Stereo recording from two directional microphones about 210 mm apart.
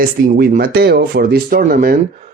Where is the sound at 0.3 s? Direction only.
45° right (ahead or behind).